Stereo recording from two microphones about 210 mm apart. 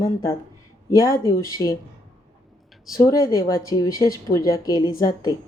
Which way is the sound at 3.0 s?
15° left (ahead or behind).